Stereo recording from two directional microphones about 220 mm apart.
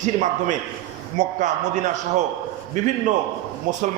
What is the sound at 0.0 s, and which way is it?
A man's voice, 35° right (ahead or behind).